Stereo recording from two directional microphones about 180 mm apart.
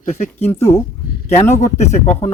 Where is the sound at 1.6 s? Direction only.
40° left (ahead or behind).